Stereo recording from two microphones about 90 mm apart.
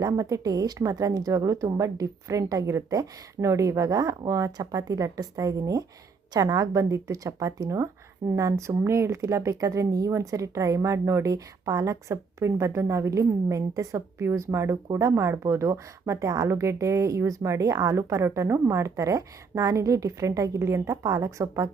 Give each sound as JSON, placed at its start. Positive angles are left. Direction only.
{"t": 0.0, "sound": "a woman's voice", "side_deg": -40}